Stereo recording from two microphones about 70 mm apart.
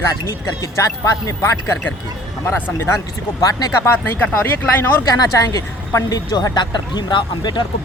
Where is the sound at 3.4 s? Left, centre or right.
Left.